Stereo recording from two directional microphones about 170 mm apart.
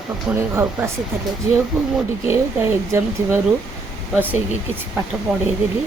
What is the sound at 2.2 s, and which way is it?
Speech, 15° right (ahead or behind).